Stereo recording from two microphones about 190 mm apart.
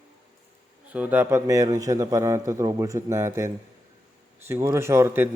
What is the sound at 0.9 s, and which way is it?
A man's voice, 10° right (ahead or behind).